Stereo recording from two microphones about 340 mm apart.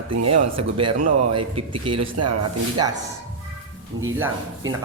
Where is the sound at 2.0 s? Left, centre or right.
Right.